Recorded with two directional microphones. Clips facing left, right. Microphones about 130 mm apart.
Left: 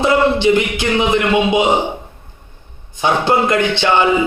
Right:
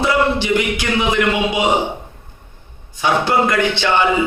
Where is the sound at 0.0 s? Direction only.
20° left (ahead or behind).